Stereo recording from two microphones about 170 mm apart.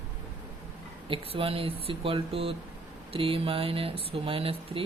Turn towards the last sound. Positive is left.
turn(degrees=-35)  # may be behind; listen again after turning